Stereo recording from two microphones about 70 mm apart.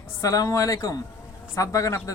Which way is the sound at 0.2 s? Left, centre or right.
Left.